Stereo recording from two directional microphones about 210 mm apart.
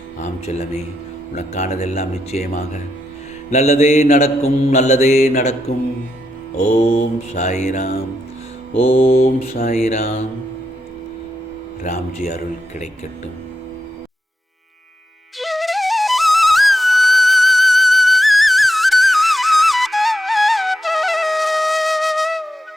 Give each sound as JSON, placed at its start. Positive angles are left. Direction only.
{"t": 0.2, "sound": "mantra", "side_deg": 30}
{"t": 3.5, "sound": "mantra", "side_deg": 30}
{"t": 9.6, "sound": "mantra", "side_deg": 30}
{"t": 11.8, "sound": "mantra", "side_deg": 35}
{"t": 15.4, "sound": "flute", "side_deg": 0}